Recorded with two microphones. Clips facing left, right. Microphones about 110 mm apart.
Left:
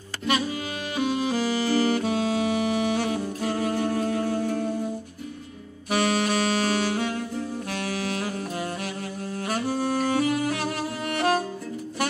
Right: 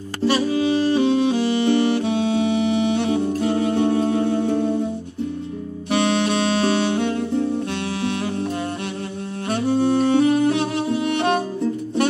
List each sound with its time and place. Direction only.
0.2 s music: 30° right (ahead or behind)
5.9 s music: 25° right (ahead or behind)
9.5 s saxophone: 25° right (ahead or behind)